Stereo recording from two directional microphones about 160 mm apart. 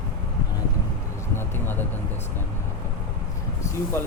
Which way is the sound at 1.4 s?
15° left (ahead or behind).